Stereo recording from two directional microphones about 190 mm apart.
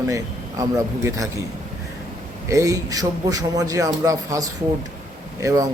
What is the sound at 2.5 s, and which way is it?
A man's voice, 15° right (ahead or behind).